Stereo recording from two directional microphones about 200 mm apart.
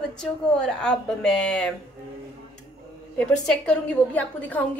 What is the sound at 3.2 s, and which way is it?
A woman's voice, 5° left (ahead or behind).